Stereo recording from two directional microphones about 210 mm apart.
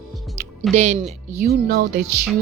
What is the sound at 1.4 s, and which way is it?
Speech, 45° right (ahead or behind).